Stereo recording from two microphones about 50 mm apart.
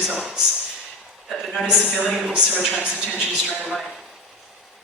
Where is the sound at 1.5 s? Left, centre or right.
Centre.